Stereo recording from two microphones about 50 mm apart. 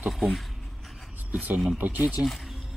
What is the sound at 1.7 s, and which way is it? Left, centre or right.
Speech, right.